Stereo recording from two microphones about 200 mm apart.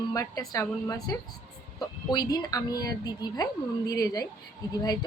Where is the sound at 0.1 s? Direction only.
20° left (ahead or behind).